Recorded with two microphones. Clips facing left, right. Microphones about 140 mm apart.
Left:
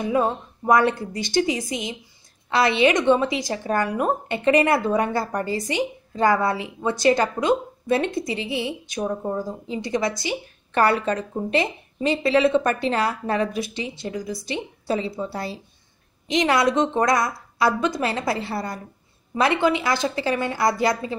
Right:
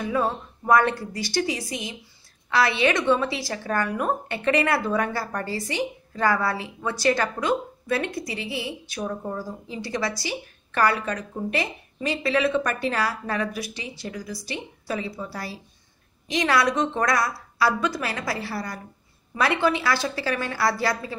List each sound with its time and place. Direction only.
0.0 s a woman's voice: 20° left (ahead or behind)